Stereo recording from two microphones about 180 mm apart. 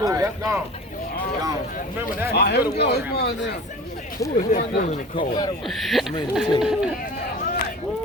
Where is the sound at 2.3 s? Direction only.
60° left (ahead or behind).